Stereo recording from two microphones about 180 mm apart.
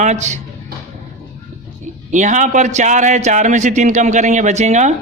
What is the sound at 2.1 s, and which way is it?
A man's voice, 45° right (ahead or behind).